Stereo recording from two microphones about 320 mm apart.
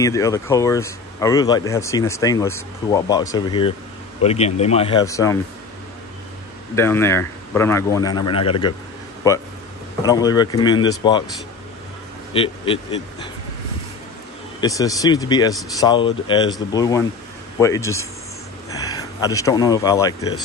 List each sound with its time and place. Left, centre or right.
0.0 s speech: centre
6.7 s speech: centre
12.4 s speech: centre
14.6 s speech: centre